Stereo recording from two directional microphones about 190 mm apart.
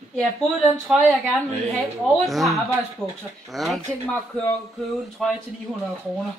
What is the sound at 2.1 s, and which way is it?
Speech, centre (ahead or behind).